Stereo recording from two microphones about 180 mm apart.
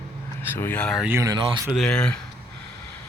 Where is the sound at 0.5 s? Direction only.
10° left (ahead or behind).